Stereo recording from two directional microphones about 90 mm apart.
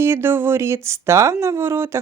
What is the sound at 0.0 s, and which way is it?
Speech, 25° right (ahead or behind).